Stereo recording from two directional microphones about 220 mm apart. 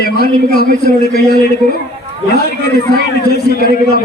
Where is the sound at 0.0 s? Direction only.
45° left (ahead or behind).